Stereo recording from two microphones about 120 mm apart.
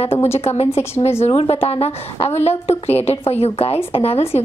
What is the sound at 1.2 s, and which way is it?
A woman's voice, 55° left (ahead or behind).